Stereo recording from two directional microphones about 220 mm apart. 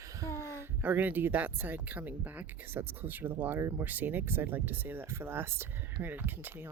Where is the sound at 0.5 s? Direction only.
10° right (ahead or behind).